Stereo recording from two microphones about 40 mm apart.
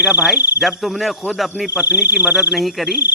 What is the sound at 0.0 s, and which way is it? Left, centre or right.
Speech, right.